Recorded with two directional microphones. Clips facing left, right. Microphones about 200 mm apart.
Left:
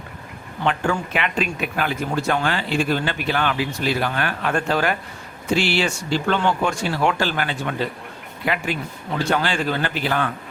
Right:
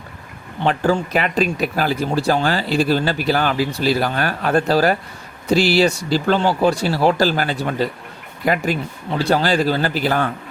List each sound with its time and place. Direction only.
0.6 s speech: 35° right (ahead or behind)